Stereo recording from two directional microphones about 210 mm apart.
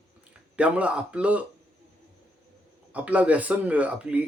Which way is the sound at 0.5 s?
5° right (ahead or behind).